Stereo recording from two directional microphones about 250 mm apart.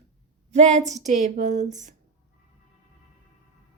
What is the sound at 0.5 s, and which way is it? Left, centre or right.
A woman's voice, right.